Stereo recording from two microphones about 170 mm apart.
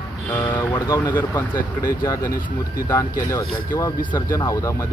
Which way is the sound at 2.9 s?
20° left (ahead or behind).